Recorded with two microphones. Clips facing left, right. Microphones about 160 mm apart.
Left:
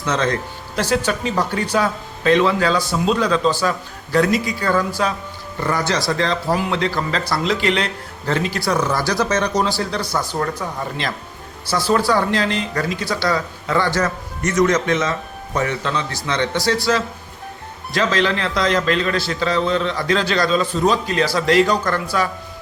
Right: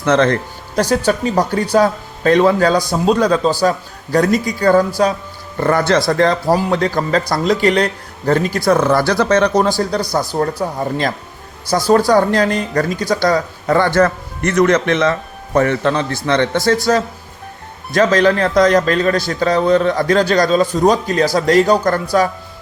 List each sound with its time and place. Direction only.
0.0 s a man's voice: 60° right (ahead or behind)
0.8 s speech: 40° right (ahead or behind)
5.5 s a man's voice: 55° right (ahead or behind)